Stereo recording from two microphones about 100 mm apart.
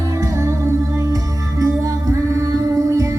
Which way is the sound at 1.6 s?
30° right (ahead or behind).